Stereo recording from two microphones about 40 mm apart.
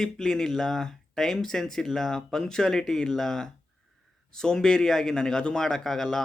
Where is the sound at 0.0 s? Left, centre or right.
Centre.